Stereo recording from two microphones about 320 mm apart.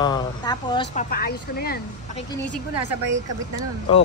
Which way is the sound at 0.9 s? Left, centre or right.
Left.